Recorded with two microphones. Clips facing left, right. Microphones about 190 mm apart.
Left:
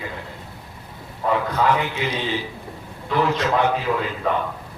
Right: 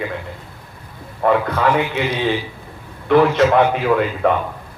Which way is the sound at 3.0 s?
65° right (ahead or behind).